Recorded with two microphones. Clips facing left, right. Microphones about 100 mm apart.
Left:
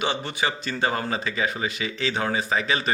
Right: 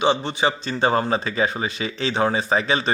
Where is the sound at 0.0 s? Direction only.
25° right (ahead or behind).